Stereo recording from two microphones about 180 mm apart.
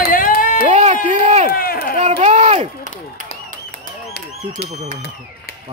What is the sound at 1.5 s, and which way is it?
Speech, 60° left (ahead or behind).